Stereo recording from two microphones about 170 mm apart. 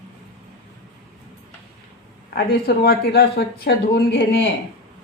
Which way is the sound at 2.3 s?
65° left (ahead or behind).